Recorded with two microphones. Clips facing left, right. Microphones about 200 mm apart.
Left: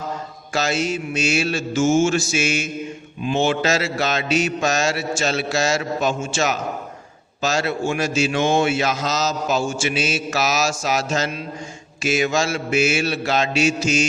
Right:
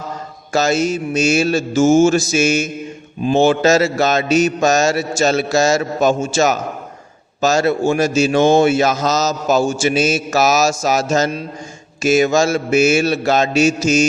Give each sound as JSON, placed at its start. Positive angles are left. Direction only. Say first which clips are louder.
{"t": 0.5, "sound": "mantra", "louder": "right 6 dB", "side_deg": -45}
{"t": 3.2, "sound": "a man's voice", "louder": "right 7 dB", "side_deg": -40}
{"t": 6.2, "sound": "mantra", "louder": "right 6 dB", "side_deg": -40}
{"t": 7.4, "sound": "a man's voice", "louder": "right 7 dB", "side_deg": -45}